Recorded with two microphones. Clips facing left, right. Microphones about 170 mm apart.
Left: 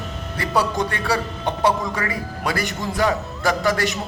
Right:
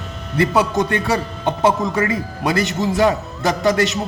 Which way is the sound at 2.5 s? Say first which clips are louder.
Right 6 dB; 20° right (ahead or behind).